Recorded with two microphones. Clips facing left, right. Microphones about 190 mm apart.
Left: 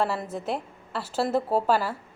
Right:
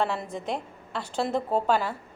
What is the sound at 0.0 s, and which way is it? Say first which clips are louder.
A woman's voice: left 1 dB; 5° left (ahead or behind).